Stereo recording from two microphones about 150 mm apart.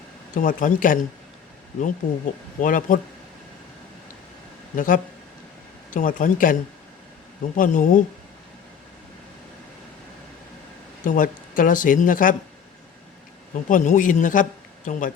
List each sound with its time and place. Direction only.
0.3 s speech: 60° left (ahead or behind)
2.0 s speech: 65° left (ahead or behind)
4.7 s speech: 60° left (ahead or behind)
11.0 s speech: 65° left (ahead or behind)
13.5 s speech: 60° left (ahead or behind)